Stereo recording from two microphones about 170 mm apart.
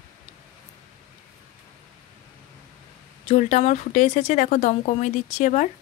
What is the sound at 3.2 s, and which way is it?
Speech, 45° left (ahead or behind).